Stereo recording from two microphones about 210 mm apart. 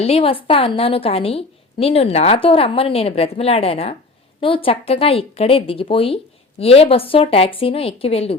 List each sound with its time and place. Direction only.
0.0 s a woman's voice: 25° left (ahead or behind)